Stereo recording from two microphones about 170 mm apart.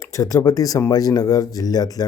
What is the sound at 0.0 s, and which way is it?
Speech, 20° left (ahead or behind).